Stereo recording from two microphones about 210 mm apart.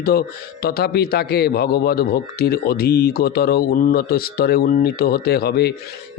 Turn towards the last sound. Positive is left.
turn(degrees=50)  # may be behind; listen again after turning